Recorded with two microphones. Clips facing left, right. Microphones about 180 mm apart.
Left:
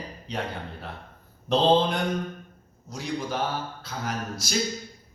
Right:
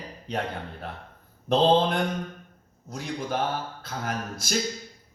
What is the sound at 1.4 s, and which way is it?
Mantra, 55° right (ahead or behind).